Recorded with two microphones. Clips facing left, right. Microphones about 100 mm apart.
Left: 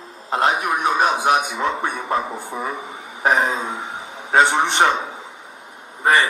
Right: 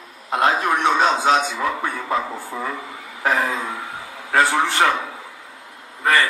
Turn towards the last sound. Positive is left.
turn(degrees=20)  # may be behind; listen again after turning